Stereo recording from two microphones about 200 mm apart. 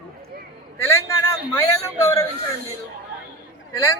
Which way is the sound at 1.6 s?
15° left (ahead or behind).